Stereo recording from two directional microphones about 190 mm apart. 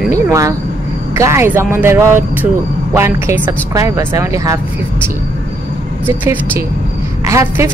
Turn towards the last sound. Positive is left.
turn(degrees=-15)  # may be behind; listen again after turning